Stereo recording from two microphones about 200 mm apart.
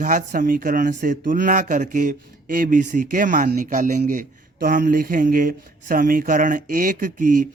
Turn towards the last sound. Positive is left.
turn(degrees=-40)  # may be behind; listen again after turning